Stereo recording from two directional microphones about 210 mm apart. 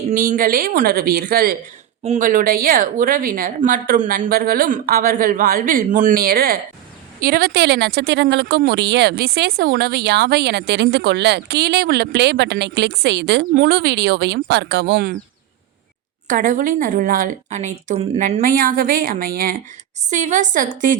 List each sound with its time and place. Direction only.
0.1 s speech: 40° right (ahead or behind)
16.2 s a woman's voice: 40° right (ahead or behind)